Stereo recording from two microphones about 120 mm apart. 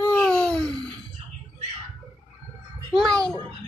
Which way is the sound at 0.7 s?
35° right (ahead or behind).